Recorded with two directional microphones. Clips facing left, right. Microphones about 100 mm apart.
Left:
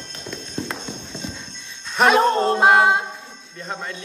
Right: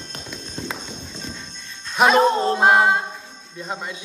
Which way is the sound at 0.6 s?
Centre (ahead or behind).